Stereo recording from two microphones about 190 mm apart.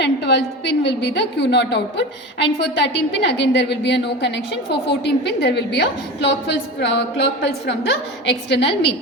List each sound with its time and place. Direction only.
0.0 s a woman's voice: 65° left (ahead or behind)